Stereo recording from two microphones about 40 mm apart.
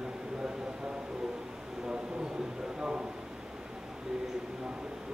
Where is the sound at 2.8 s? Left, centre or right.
Right.